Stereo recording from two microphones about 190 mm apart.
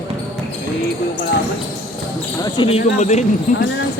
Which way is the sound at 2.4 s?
30° left (ahead or behind).